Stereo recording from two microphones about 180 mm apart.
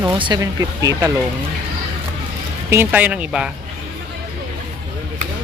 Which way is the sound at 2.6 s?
10° right (ahead or behind).